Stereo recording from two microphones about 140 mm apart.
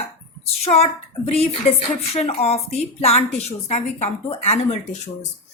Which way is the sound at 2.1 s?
50° left (ahead or behind).